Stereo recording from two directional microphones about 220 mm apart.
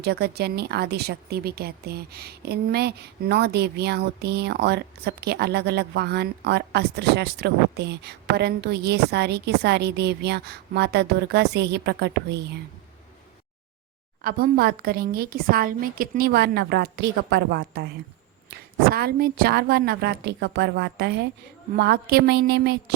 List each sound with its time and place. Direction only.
0.0 s speech: 45° right (ahead or behind)
14.2 s speech: 40° right (ahead or behind)
18.9 s speech: 45° right (ahead or behind)